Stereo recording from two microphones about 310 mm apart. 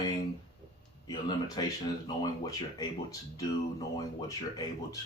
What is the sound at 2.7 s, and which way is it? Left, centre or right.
Speech, centre.